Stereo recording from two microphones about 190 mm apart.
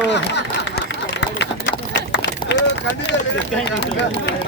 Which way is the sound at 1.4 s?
65° left (ahead or behind).